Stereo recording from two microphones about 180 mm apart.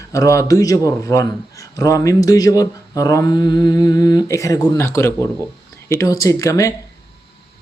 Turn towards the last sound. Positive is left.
turn(degrees=15)  # may be behind; listen again after turning